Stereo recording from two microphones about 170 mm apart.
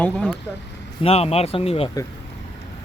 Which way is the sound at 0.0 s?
5° left (ahead or behind).